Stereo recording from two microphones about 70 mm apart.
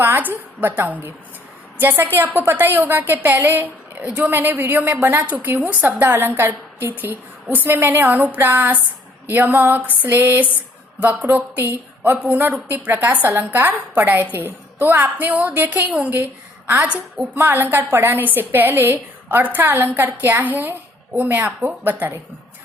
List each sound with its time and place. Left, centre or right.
0.0 s a woman's voice: right
4.3 s a woman's voice: right
17.3 s a woman's voice: right